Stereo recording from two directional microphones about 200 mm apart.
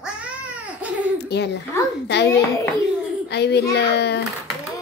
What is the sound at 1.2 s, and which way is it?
A woman's voice, 55° left (ahead or behind).